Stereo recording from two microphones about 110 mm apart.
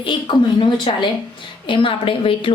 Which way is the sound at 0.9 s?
50° left (ahead or behind).